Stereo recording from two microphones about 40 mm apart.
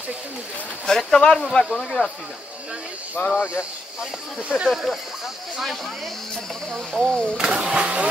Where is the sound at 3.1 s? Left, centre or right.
Left.